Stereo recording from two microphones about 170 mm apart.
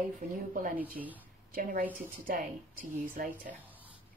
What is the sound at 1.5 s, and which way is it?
A woman's voice, 55° right (ahead or behind).